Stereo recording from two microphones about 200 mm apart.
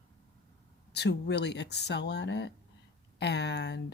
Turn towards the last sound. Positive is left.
turn(degrees=60)  # may be behind; listen again after turning